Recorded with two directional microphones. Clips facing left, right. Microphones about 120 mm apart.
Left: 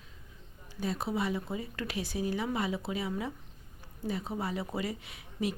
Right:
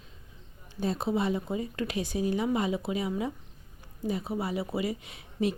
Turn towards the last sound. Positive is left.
turn(degrees=-25)  # may be behind; listen again after turning